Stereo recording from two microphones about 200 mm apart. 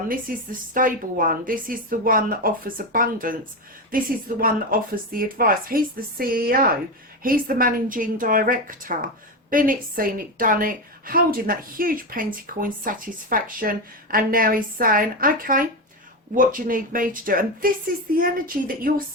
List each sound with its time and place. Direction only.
0.1 s a woman's voice: 45° right (ahead or behind)